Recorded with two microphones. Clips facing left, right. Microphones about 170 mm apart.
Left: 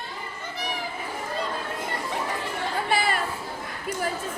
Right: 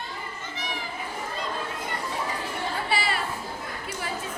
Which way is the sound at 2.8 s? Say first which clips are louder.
Left 4 dB; 50° left (ahead or behind).